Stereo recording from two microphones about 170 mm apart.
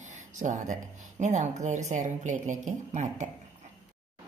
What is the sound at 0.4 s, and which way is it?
Speech, 45° right (ahead or behind).